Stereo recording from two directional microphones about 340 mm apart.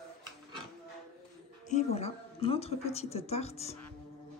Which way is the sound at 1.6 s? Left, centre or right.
Centre.